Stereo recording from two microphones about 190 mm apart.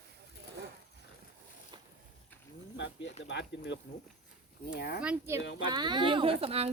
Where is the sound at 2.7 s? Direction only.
70° left (ahead or behind).